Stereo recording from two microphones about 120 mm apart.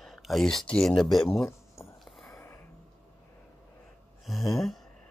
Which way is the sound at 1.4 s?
20° left (ahead or behind).